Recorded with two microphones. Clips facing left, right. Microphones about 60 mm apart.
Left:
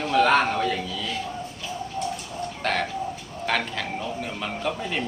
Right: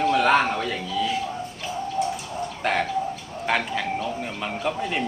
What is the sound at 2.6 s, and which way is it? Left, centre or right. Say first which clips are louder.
Bird: right 2 dB; centre.